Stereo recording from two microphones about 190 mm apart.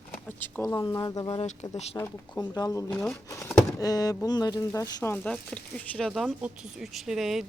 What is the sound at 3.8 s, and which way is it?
Speech, 20° left (ahead or behind).